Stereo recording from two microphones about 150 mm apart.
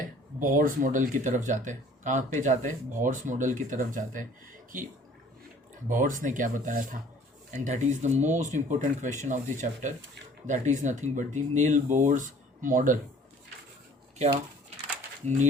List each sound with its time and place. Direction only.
0.3 s speech: 65° right (ahead or behind)
5.9 s speech: 60° right (ahead or behind)